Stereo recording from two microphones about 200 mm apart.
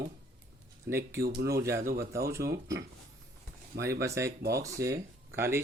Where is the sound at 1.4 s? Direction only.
15° right (ahead or behind).